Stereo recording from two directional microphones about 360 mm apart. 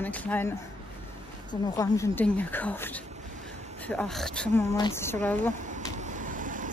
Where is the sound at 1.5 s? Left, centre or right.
Centre.